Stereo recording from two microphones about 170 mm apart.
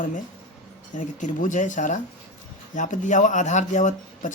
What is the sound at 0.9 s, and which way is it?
Speech, 50° left (ahead or behind).